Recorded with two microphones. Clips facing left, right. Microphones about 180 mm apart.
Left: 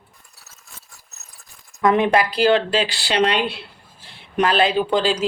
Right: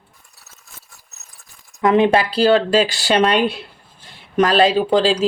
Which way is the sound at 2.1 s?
35° right (ahead or behind).